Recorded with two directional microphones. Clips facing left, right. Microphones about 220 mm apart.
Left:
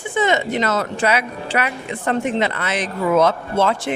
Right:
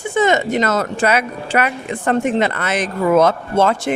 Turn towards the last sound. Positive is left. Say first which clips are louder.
# right 3 dB
turn(degrees=-45)  # may be behind; listen again after turning